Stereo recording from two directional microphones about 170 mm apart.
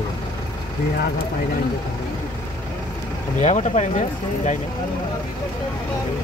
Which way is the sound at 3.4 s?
40° left (ahead or behind).